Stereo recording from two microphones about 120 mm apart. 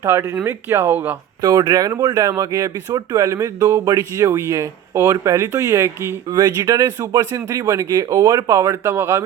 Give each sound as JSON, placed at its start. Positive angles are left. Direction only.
{"t": 0.0, "sound": "speech", "side_deg": -20}
{"t": 1.4, "sound": "speech", "side_deg": -35}